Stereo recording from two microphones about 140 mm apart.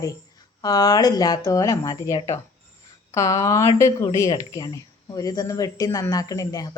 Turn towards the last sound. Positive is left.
turn(degrees=25)  # may be behind; listen again after turning